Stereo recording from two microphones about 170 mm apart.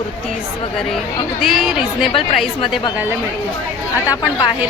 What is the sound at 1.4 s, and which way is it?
Speech, centre (ahead or behind).